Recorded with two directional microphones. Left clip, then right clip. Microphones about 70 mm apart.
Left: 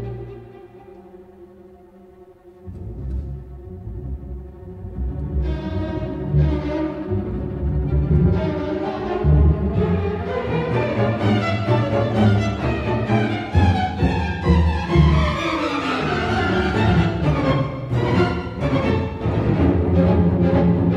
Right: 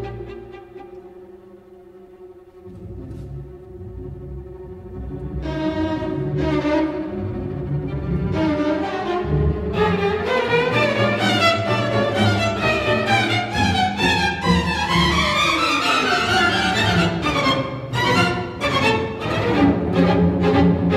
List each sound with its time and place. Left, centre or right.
5.4 s music: right